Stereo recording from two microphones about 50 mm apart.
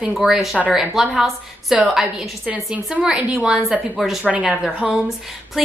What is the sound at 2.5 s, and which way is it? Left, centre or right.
A woman's voice, right.